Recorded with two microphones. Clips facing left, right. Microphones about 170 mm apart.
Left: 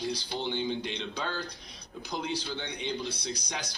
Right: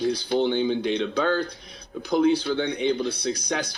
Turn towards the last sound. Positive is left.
turn(degrees=-60)  # may be behind; listen again after turning